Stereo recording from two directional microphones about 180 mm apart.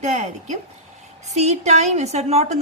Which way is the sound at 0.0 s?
40° right (ahead or behind).